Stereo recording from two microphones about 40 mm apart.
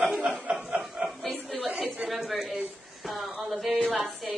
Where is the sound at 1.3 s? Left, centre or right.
Centre.